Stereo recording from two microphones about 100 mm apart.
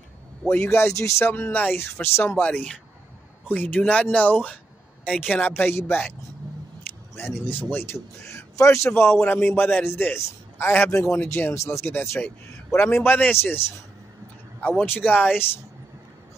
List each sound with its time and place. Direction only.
0.5 s a man's voice: 20° left (ahead or behind)
5.7 s a man's voice: 20° left (ahead or behind)
7.4 s a man's voice: 20° left (ahead or behind)
11.5 s a man's voice: 30° left (ahead or behind); by 15.4 s 15° left (ahead or behind)